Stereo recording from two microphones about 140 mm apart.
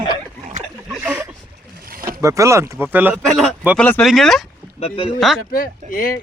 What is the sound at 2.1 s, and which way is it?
Speech, 20° right (ahead or behind).